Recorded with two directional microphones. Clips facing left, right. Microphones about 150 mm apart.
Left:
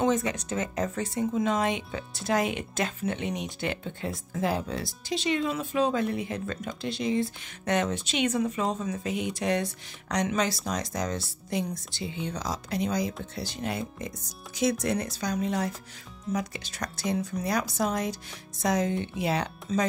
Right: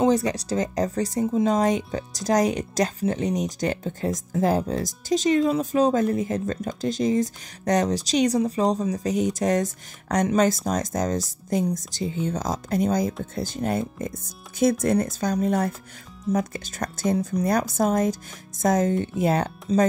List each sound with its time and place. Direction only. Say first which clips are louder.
0.0 s speech: right 5 dB; 35° right (ahead or behind)